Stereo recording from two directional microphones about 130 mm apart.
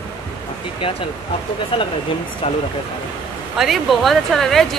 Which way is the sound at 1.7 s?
45° left (ahead or behind).